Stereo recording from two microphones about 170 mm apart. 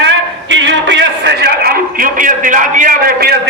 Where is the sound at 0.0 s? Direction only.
90° right.